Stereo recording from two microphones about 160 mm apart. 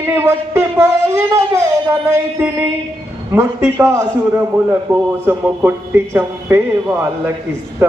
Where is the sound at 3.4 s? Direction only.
15° right (ahead or behind).